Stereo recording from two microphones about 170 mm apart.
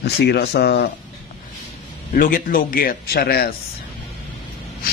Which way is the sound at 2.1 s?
55° left (ahead or behind).